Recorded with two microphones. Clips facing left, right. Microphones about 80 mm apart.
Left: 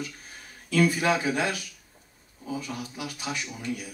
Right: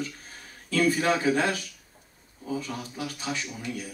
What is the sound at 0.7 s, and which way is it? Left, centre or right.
Speech, right.